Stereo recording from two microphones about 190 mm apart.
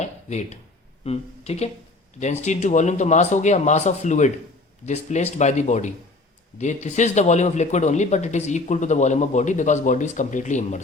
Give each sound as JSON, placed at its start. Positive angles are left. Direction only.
{"t": 0.0, "sound": "speech", "side_deg": 35}